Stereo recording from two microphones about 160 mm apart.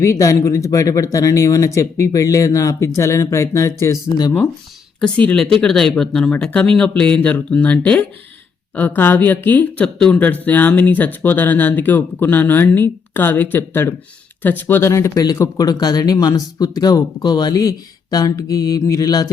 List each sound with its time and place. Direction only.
0.0 s speech: 20° left (ahead or behind)
4.9 s speech: 5° left (ahead or behind); by 19.3 s 25° left (ahead or behind)